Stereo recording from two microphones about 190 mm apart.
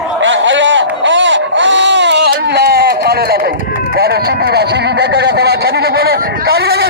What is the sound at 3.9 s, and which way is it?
Speech, 55° right (ahead or behind).